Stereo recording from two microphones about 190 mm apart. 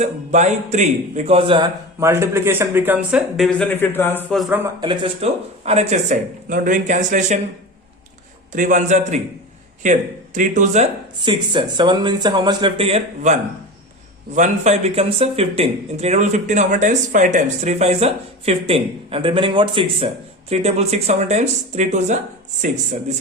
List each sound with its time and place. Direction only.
0.0 s speech: 40° right (ahead or behind)
2.0 s speech: 15° right (ahead or behind); by 4.4 s 10° left (ahead or behind)
4.4 s speech: 10° right (ahead or behind)
4.8 s speech: 30° right (ahead or behind)
8.5 s speech: 40° right (ahead or behind)
11.3 s speech: 25° right (ahead or behind)
14.3 s speech: 40° right (ahead or behind)